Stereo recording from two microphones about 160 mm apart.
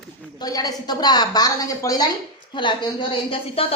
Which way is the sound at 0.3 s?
25° left (ahead or behind).